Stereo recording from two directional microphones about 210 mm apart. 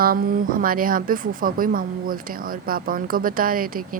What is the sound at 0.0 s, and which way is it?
A woman's voice, 45° right (ahead or behind).